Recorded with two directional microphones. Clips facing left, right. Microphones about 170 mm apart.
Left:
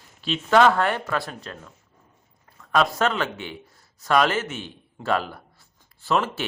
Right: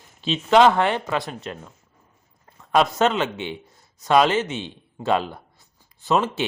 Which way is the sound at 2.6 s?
20° right (ahead or behind).